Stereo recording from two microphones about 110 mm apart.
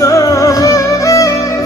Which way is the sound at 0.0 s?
30° left (ahead or behind).